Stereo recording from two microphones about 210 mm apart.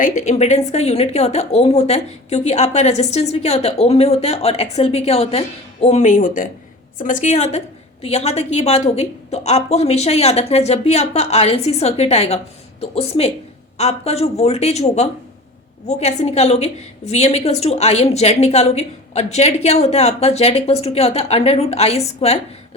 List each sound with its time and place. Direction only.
0.0 s a woman's voice: 35° left (ahead or behind)